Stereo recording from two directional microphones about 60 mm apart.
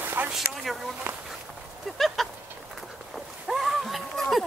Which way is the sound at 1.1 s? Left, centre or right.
Right.